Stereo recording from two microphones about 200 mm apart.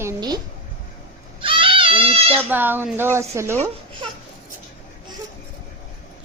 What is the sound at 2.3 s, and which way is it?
A woman's voice, 10° right (ahead or behind).